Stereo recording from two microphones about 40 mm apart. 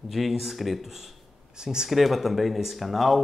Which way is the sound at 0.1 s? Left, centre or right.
Centre.